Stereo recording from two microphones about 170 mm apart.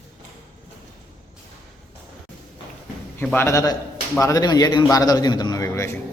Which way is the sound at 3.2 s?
10° left (ahead or behind).